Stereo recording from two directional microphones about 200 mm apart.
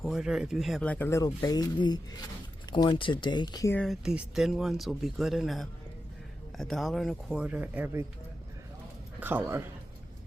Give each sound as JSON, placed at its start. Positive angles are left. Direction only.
{"t": 0.0, "sound": "speech", "side_deg": 0}
{"t": 3.8, "sound": "speech", "side_deg": 0}